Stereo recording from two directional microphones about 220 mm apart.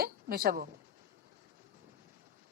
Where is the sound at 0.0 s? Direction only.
45° right (ahead or behind).